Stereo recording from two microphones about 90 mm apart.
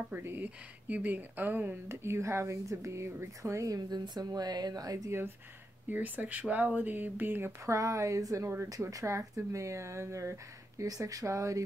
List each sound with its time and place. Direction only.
0.1 s speech: 25° right (ahead or behind)
5.9 s speech: 20° right (ahead or behind); by 11.6 s 35° right (ahead or behind)